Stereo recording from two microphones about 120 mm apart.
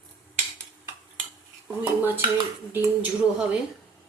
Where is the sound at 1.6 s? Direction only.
15° right (ahead or behind).